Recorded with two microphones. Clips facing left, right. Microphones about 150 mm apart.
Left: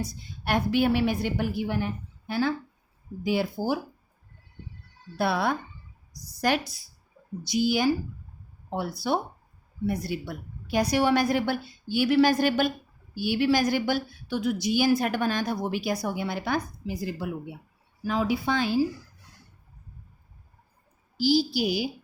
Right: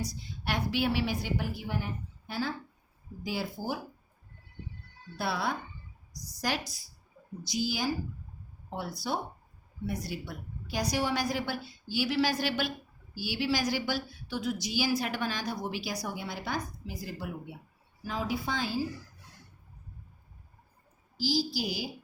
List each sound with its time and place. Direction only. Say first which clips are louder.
0.0 s a woman's voice: left 3 dB; 50° left (ahead or behind)
5.1 s a woman's voice: left 6 dB; 60° left (ahead or behind)
18.0 s speech: left 7 dB; 75° left (ahead or behind)
21.2 s a woman's voice: left 7 dB; 65° left (ahead or behind)